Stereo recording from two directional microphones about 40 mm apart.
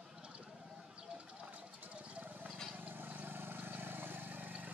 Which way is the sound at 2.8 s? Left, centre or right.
Right.